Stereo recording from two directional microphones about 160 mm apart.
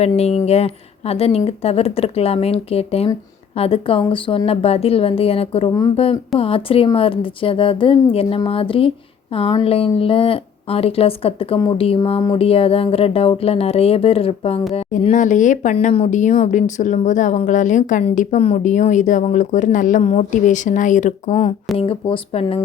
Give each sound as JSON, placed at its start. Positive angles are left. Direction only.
{"t": 0.0, "sound": "a woman's voice", "side_deg": 40}